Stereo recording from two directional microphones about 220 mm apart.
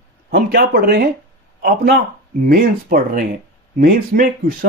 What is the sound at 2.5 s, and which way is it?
Speech, 40° right (ahead or behind).